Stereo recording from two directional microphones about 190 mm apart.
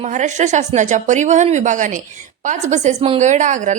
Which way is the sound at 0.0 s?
40° right (ahead or behind).